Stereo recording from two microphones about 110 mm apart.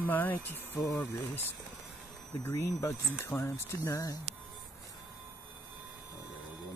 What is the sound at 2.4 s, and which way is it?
Speech, 25° left (ahead or behind).